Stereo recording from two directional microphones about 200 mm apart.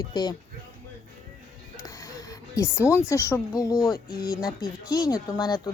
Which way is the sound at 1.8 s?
15° left (ahead or behind).